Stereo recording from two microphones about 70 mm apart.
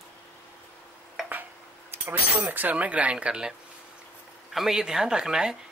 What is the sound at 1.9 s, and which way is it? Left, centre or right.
Speech, right.